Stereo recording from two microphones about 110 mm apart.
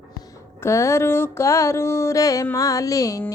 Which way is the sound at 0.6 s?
25° left (ahead or behind).